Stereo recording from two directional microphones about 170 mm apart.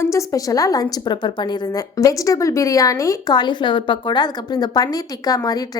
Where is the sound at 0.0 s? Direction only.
15° left (ahead or behind).